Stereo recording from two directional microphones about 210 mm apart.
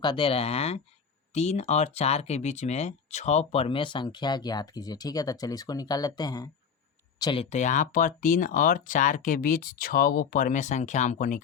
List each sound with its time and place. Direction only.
0.0 s speech: 25° left (ahead or behind)
7.5 s speech: 35° left (ahead or behind)